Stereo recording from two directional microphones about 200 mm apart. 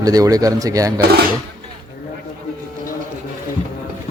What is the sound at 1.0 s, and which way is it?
Speech, 50° right (ahead or behind).